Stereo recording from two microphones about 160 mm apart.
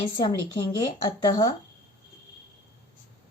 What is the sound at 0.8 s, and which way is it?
Speech, 25° left (ahead or behind).